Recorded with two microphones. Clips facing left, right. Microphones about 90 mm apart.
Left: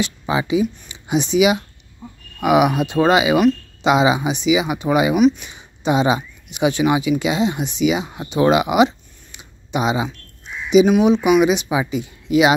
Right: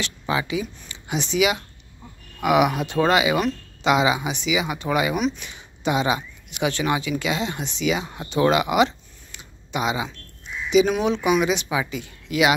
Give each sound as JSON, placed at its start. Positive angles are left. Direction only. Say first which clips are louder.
{"t": 0.0, "sound": "speech", "louder": "left 4 dB", "side_deg": 20}
{"t": 5.1, "sound": "speech", "louder": "left 9 dB", "side_deg": 5}
{"t": 5.4, "sound": "speech", "louder": "left 1 dB", "side_deg": 20}
{"t": 10.9, "sound": "speech", "louder": "left 6 dB", "side_deg": 10}